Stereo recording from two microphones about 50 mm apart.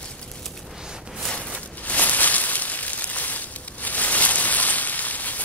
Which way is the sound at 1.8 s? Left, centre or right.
Left.